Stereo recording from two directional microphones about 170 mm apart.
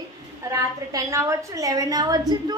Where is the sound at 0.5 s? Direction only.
20° right (ahead or behind).